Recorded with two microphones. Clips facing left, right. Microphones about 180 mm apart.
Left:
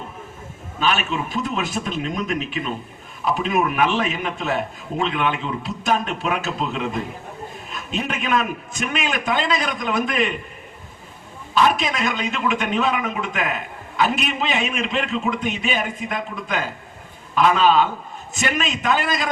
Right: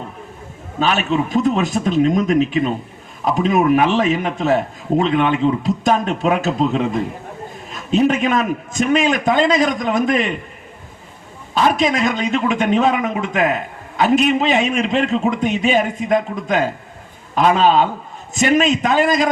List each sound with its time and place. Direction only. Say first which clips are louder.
0.8 s a man's voice: right 5 dB; 40° right (ahead or behind)
11.5 s a man's voice: right 3 dB; 40° right (ahead or behind)